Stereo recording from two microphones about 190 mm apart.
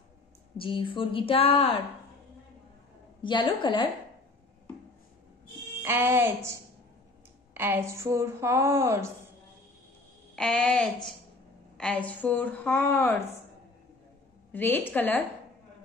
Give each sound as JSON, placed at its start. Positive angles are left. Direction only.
{"t": 0.6, "sound": "a woman's voice", "side_deg": 25}
{"t": 3.2, "sound": "a woman's voice", "side_deg": 25}
{"t": 5.8, "sound": "a woman's voice", "side_deg": -10}
{"t": 10.3, "sound": "a sound", "side_deg": 5}
{"t": 11.7, "sound": "a woman's voice", "side_deg": 5}
{"t": 14.5, "sound": "a woman's voice", "side_deg": 10}